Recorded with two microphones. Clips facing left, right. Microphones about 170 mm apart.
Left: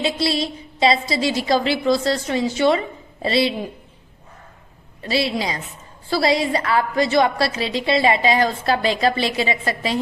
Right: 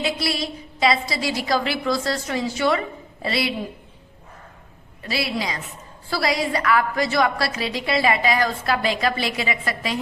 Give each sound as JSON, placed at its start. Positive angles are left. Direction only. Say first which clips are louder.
{"t": 0.0, "sound": "a woman's voice", "louder": "left 4 dB", "side_deg": 25}
{"t": 5.0, "sound": "a woman's voice", "louder": "left 4 dB", "side_deg": 25}